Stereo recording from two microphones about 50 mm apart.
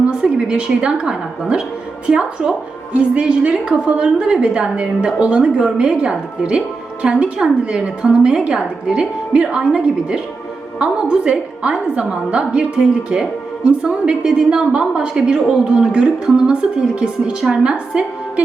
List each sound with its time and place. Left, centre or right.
0.0 s a woman's voice: centre